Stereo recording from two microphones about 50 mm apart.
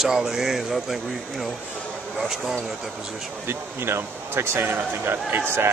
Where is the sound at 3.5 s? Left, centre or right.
Right.